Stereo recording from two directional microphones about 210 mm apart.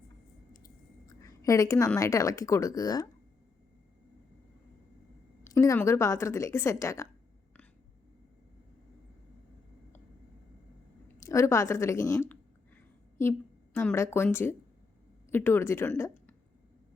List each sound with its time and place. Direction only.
1.0 s a woman's voice: 15° left (ahead or behind)
5.5 s a woman's voice: 15° left (ahead or behind)
11.2 s a woman's voice: 15° left (ahead or behind)
13.7 s a woman's voice: 10° left (ahead or behind)